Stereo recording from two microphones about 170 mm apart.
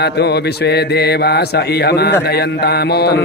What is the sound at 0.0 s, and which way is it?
Mantra, 75° left (ahead or behind).